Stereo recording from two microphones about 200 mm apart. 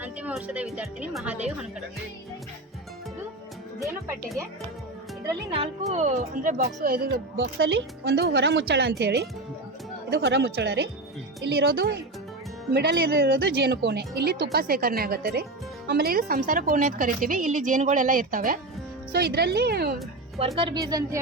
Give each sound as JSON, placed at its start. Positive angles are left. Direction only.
{"t": 0.0, "sound": "a woman's voice", "side_deg": -5}
{"t": 5.5, "sound": "speech", "side_deg": -30}
{"t": 7.3, "sound": "speech", "side_deg": -70}
{"t": 20.6, "sound": "a woman's voice", "side_deg": -20}